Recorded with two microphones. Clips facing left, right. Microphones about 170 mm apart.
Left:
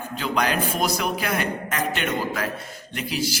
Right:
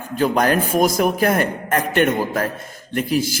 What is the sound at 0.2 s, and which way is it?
A man's voice, 45° right (ahead or behind).